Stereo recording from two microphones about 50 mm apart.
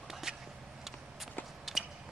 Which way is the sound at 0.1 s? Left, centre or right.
Centre.